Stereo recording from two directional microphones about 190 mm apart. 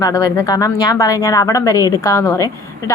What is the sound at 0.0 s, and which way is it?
A woman's voice, 20° left (ahead or behind).